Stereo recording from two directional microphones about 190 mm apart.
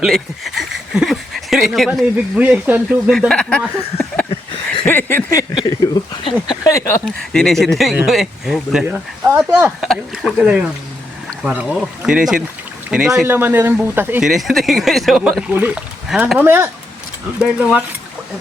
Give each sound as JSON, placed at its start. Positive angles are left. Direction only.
{"t": 0.0, "sound": "speech", "side_deg": 0}
{"t": 4.3, "sound": "a sound", "side_deg": 30}
{"t": 4.9, "sound": "speech", "side_deg": 10}
{"t": 7.0, "sound": "speech", "side_deg": 0}